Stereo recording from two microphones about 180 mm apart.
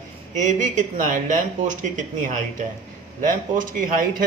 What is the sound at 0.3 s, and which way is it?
Speech, 45° right (ahead or behind).